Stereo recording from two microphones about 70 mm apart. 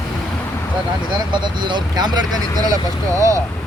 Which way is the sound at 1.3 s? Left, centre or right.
Right.